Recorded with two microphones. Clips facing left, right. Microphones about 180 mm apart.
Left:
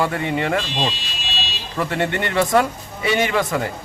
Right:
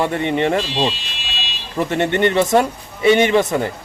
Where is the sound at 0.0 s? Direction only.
25° right (ahead or behind).